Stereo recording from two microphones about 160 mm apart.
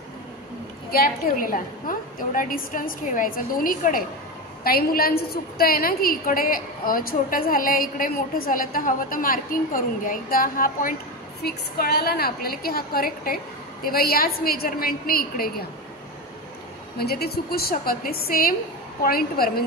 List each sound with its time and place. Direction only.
0.9 s a woman's voice: 65° left (ahead or behind)
11.4 s a woman's voice: 75° left (ahead or behind)
17.0 s a woman's voice: 80° left